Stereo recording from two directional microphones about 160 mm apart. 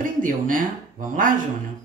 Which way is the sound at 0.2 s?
60° right (ahead or behind).